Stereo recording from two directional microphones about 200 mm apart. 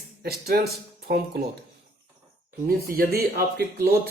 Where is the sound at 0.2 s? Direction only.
50° right (ahead or behind).